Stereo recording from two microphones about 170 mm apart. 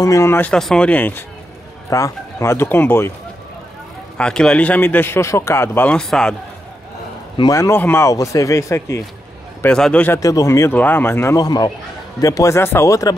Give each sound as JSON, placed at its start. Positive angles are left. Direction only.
{"t": 0.0, "sound": "a man's voice", "side_deg": 20}
{"t": 4.2, "sound": "a man's voice", "side_deg": 5}
{"t": 7.3, "sound": "a man's voice", "side_deg": 20}
{"t": 9.6, "sound": "a man's voice", "side_deg": 5}
{"t": 10.2, "sound": "a man's voice", "side_deg": 20}